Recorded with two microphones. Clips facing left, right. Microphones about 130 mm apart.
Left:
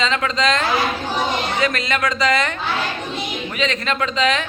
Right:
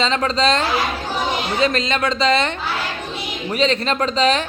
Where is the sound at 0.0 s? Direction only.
35° right (ahead or behind).